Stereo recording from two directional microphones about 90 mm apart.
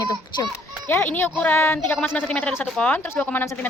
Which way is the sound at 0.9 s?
20° left (ahead or behind).